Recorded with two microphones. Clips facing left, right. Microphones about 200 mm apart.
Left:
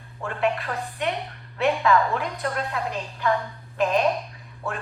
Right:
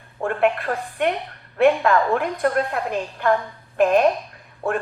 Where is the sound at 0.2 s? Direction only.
55° right (ahead or behind).